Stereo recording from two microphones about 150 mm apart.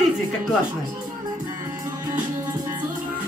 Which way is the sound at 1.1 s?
25° right (ahead or behind).